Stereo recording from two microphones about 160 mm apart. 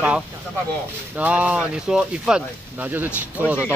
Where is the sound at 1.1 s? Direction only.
10° right (ahead or behind).